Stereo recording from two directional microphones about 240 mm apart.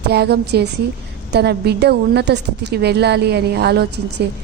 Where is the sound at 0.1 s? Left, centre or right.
Right.